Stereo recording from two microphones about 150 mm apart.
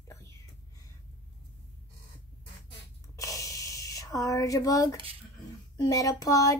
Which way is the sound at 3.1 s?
20° left (ahead or behind).